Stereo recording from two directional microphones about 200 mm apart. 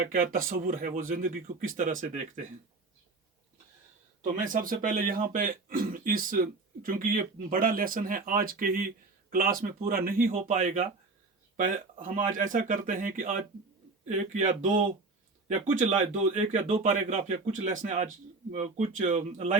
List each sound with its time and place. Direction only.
0.0 s speech: 45° right (ahead or behind)
4.5 s speech: 45° right (ahead or behind)
10.3 s speech: 30° right (ahead or behind)
16.8 s speech: 40° right (ahead or behind)